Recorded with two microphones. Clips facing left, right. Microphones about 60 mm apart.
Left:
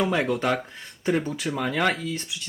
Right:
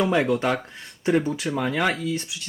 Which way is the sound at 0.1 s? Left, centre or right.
Centre.